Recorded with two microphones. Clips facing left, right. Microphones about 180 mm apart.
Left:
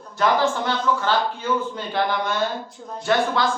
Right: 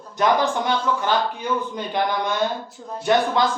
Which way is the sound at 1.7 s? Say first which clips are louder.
Even; 15° right (ahead or behind).